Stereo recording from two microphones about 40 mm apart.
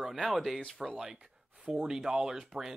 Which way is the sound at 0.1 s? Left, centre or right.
Centre.